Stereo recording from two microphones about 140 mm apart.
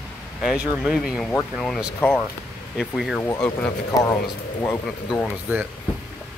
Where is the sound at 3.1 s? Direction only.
20° left (ahead or behind).